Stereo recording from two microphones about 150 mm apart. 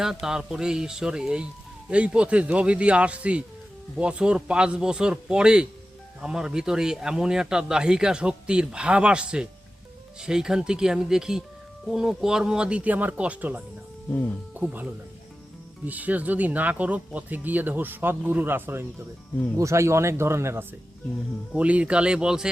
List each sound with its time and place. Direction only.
0.0 s speech: 5° right (ahead or behind)
14.1 s speech: 10° left (ahead or behind)
14.5 s speech: 10° right (ahead or behind)
15.9 s speech: 10° right (ahead or behind)